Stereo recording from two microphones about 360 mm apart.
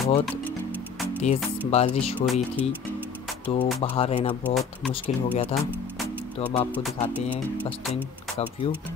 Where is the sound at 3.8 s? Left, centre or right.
Centre.